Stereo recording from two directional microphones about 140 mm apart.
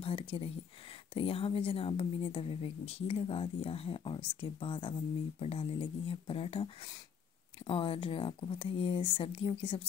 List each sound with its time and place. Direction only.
0.0 s speech: 40° left (ahead or behind)